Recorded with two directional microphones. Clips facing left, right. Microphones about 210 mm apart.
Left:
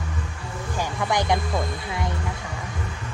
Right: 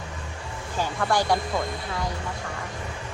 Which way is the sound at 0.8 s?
20° left (ahead or behind).